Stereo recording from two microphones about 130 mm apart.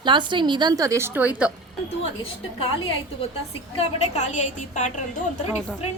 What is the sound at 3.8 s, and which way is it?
A woman's voice, 60° left (ahead or behind).